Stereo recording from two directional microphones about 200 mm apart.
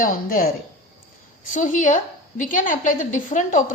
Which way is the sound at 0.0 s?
45° left (ahead or behind).